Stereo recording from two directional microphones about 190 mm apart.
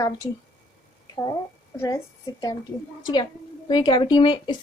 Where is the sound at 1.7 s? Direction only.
15° left (ahead or behind).